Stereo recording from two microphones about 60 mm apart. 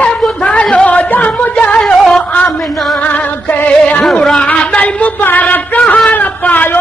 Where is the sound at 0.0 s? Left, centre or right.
Left.